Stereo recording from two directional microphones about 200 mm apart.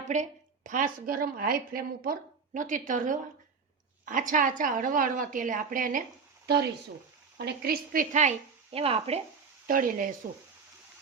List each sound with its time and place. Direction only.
0.1 s a woman's voice: 40° right (ahead or behind)
6.4 s a sound: 55° right (ahead or behind)
7.3 s a woman's voice: 55° right (ahead or behind); by 9.2 s 30° right (ahead or behind)
9.6 s a woman's voice: 45° right (ahead or behind)